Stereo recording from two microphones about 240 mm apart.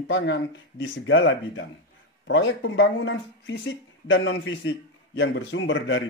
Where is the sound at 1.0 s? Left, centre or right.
Left.